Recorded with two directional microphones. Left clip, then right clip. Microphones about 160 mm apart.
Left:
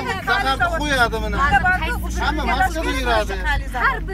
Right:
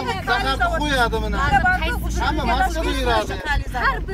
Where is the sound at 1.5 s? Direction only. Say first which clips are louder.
Right 1 dB; 20° right (ahead or behind).